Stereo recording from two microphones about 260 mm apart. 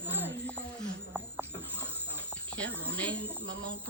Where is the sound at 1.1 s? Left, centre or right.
Centre.